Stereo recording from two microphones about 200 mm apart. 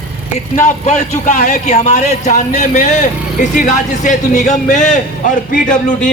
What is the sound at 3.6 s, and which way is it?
A man's voice, 40° left (ahead or behind).